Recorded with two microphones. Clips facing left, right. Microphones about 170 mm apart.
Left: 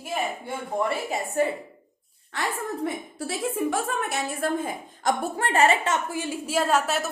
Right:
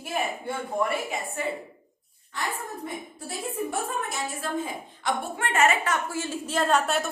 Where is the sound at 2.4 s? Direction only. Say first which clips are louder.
Left 4 dB; 80° left.